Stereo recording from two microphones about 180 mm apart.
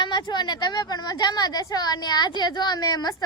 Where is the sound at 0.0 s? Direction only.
25° left (ahead or behind).